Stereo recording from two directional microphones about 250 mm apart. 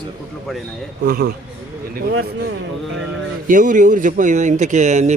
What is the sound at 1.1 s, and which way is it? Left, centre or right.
Speech, right.